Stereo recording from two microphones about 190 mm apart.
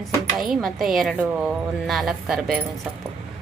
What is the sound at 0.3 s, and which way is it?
Speech, centre (ahead or behind).